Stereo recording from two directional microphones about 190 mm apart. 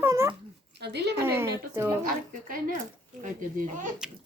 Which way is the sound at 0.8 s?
60° right (ahead or behind).